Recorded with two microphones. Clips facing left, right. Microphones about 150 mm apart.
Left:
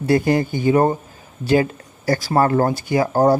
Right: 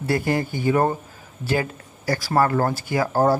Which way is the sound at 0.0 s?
20° left (ahead or behind).